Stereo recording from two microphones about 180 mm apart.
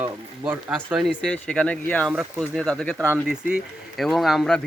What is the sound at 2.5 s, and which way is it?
Speech, 5° left (ahead or behind).